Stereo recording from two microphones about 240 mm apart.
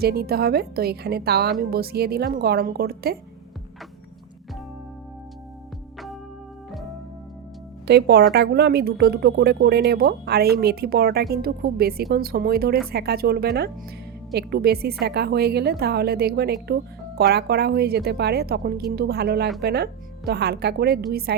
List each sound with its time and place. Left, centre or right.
0.0 s a woman's voice: right
7.9 s a woman's voice: right